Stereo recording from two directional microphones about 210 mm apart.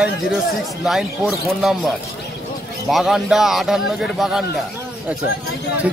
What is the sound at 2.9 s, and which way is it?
Speech, centre (ahead or behind).